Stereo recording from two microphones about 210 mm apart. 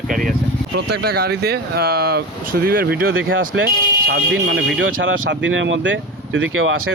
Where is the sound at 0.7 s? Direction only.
50° right (ahead or behind).